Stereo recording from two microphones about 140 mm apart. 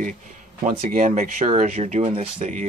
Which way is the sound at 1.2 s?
55° right (ahead or behind).